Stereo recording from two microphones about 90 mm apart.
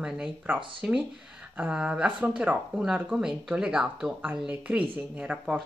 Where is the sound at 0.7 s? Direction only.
15° right (ahead or behind).